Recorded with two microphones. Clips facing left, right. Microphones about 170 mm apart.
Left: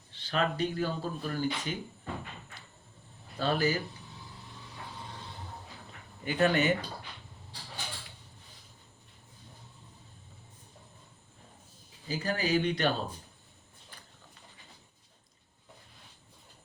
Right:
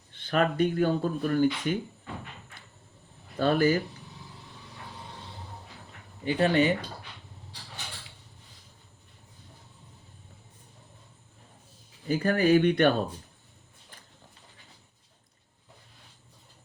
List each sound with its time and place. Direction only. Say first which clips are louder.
0.1 s speech: right 5 dB; 55° right (ahead or behind)
3.3 s speech: right 6 dB; 50° right (ahead or behind)
6.2 s speech: right 3 dB; 30° right (ahead or behind)
12.0 s speech: right 8 dB; 55° right (ahead or behind)